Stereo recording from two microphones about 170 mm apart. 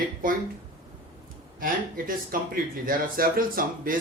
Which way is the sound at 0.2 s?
55° right (ahead or behind).